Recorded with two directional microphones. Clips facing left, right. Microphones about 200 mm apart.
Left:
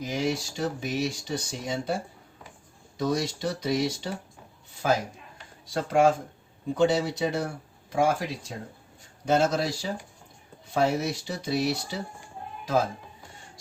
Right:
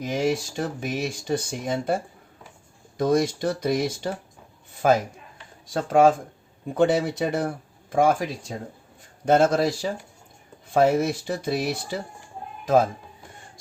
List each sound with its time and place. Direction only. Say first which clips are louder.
0.0 s speech: right 4 dB; 55° right (ahead or behind)
3.0 s speech: right 6 dB; 50° right (ahead or behind)
4.7 s a sound: right 6 dB; 55° right (ahead or behind)
5.7 s speech: right 4 dB; 50° right (ahead or behind)